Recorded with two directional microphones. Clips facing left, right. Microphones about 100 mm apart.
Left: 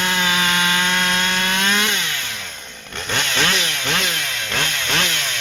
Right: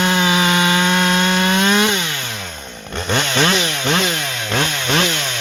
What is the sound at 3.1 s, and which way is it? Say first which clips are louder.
Chainsaw: right 5 dB; 25° right (ahead or behind).